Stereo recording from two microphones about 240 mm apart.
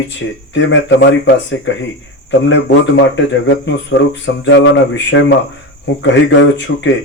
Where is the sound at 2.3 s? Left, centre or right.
Left.